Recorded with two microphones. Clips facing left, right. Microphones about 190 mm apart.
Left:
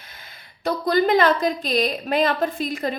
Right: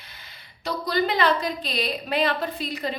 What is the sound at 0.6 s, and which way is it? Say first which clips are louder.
A woman's voice: left 5 dB; 50° left (ahead or behind).